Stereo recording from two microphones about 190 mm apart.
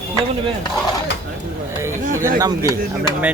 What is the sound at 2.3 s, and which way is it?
Speech, 20° right (ahead or behind).